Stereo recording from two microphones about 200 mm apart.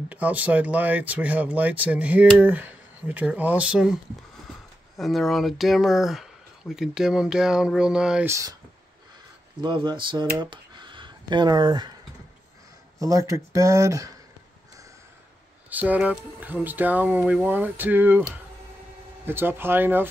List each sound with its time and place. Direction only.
0.1 s speech: 5° right (ahead or behind)
4.9 s speech: centre (ahead or behind)
9.6 s speech: 20° right (ahead or behind)
13.0 s speech: 15° right (ahead or behind)
15.7 s speech: 10° right (ahead or behind)
19.2 s speech: 10° right (ahead or behind)